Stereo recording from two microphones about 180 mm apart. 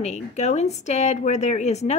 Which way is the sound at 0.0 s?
40° left (ahead or behind).